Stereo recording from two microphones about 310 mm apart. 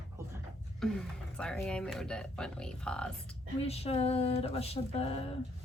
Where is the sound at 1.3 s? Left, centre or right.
Centre.